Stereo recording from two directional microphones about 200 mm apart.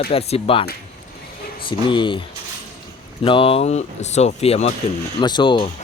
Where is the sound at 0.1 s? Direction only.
30° left (ahead or behind).